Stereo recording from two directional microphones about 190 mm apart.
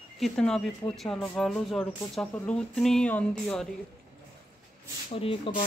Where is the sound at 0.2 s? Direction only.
Centre (ahead or behind).